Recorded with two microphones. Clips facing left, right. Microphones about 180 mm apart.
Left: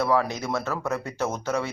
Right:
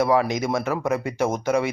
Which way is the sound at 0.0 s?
15° right (ahead or behind).